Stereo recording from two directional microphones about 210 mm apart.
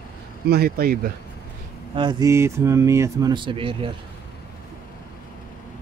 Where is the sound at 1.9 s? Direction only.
20° right (ahead or behind).